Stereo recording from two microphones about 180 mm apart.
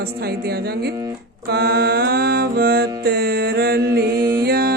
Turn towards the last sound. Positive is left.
turn(degrees=-60)  # may be behind; listen again after turning